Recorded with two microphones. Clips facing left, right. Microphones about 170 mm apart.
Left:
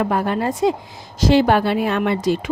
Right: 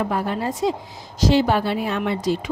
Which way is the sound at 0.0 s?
65° left (ahead or behind).